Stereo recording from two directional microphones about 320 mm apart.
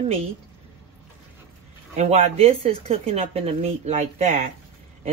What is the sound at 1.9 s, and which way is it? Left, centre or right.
Speech, right.